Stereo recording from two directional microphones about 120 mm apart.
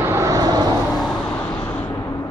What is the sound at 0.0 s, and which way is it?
Vehicle, 25° right (ahead or behind).